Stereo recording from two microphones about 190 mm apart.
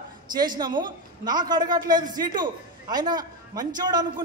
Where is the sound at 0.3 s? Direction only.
20° right (ahead or behind).